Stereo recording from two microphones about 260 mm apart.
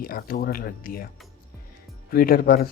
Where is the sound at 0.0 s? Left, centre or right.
Left.